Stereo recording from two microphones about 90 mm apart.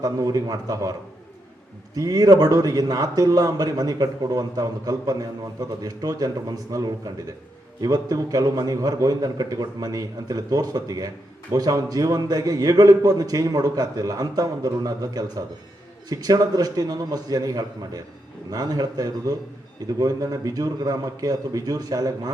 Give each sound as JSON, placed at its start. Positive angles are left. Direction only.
{"t": 0.0, "sound": "a man's voice", "side_deg": -40}
{"t": 2.0, "sound": "a man's voice", "side_deg": -40}